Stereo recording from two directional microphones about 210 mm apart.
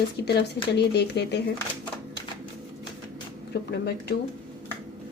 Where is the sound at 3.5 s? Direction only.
50° left (ahead or behind).